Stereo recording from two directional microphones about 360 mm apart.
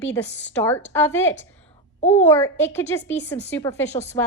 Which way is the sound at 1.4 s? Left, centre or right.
Centre.